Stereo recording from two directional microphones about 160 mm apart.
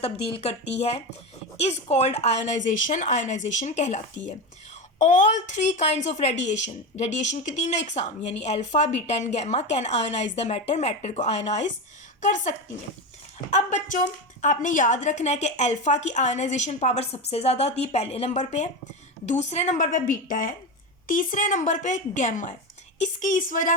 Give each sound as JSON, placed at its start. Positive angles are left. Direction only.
{"t": 0.0, "sound": "a woman's voice", "side_deg": 35}